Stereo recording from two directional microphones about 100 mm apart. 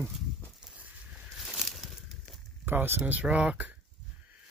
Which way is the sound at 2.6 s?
20° right (ahead or behind).